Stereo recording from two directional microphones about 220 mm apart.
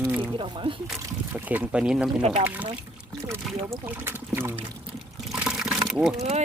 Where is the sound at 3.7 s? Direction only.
10° right (ahead or behind).